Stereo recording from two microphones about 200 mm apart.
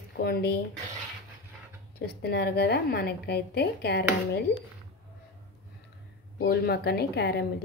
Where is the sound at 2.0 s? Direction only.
55° left (ahead or behind).